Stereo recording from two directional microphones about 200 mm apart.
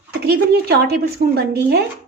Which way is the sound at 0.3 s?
50° right (ahead or behind).